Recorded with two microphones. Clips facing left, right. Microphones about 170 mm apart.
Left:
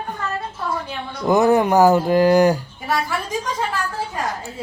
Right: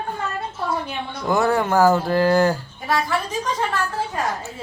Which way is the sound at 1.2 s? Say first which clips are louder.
Left 4 dB; 20° left (ahead or behind).